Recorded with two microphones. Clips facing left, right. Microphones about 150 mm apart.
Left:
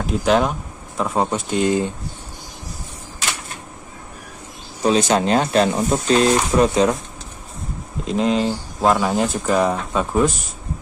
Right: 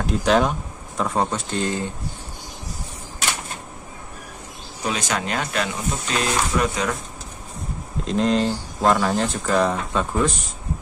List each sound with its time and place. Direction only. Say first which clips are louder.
0.0 s speech: left 1 dB; centre (ahead or behind)
4.8 s speech: left 9 dB; 30° left (ahead or behind)
8.0 s speech: left 1 dB; 5° left (ahead or behind)